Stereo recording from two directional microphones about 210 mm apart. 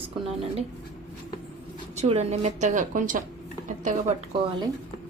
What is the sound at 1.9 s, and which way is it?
A woman's voice, 30° right (ahead or behind).